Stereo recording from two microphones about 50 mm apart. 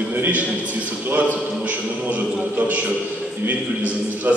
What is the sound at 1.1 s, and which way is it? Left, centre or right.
A man's voice, right.